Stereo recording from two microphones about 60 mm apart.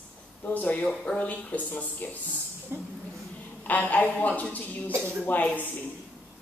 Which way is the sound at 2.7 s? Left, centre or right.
Right.